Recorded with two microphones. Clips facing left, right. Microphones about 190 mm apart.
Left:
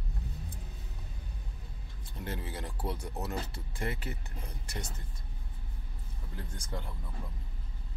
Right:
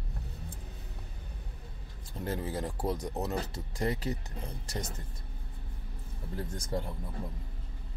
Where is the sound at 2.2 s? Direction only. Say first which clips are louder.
Right 5 dB; 40° right (ahead or behind).